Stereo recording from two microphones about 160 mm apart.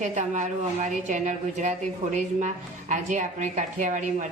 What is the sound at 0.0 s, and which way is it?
A woman's voice, 50° right (ahead or behind).